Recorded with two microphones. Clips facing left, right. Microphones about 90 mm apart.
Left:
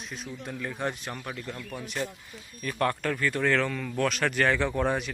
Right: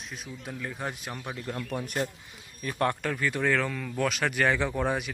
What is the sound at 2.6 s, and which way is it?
Speech, 20° right (ahead or behind).